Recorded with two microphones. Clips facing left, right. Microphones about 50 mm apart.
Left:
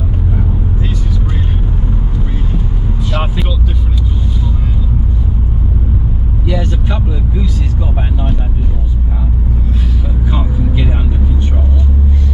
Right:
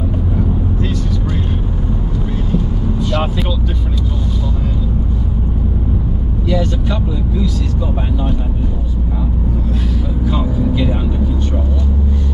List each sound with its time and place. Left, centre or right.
3.0 s vehicle: centre
6.4 s vehicle: centre
10.2 s vehicle: centre